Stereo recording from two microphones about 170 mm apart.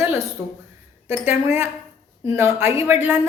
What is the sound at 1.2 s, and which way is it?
A woman's voice, 15° right (ahead or behind).